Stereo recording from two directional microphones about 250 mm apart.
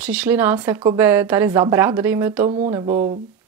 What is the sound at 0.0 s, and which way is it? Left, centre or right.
Speech, centre.